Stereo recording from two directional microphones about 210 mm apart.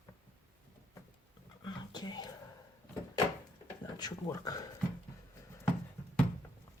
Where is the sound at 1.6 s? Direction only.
20° left (ahead or behind).